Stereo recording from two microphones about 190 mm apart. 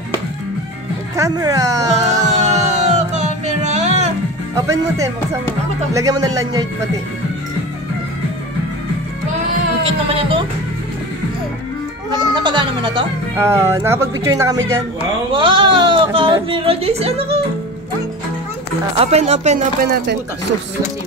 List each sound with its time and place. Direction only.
1.1 s speech: 20° right (ahead or behind)
2.2 s a sound: 35° right (ahead or behind)
4.6 s speech: 15° right (ahead or behind)
10.0 s speech: 30° right (ahead or behind)
12.1 s speech: 25° right (ahead or behind)
13.4 s speech: 15° right (ahead or behind); by 17.4 s 30° right (ahead or behind)
18.9 s speech: 35° right (ahead or behind); by 20.2 s 50° right (ahead or behind)